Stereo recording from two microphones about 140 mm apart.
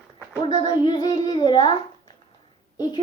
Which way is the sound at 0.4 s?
30° left (ahead or behind).